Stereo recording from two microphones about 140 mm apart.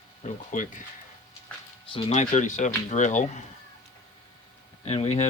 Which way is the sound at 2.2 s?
60° left (ahead or behind).